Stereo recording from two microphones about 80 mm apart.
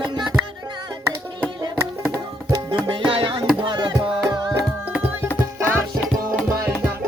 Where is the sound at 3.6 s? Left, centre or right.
Right.